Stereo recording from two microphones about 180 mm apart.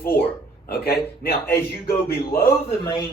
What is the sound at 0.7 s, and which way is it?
Speech, 55° left (ahead or behind).